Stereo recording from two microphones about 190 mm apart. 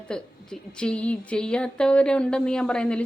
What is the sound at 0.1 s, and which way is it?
A woman's voice, 5° left (ahead or behind).